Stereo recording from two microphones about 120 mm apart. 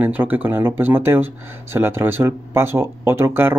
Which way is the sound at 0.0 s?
15° right (ahead or behind).